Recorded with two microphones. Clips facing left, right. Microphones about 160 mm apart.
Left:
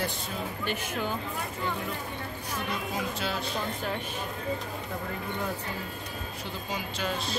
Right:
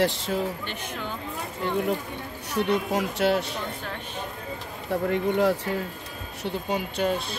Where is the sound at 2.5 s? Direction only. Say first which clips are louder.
Right 10 dB; 75° right (ahead or behind).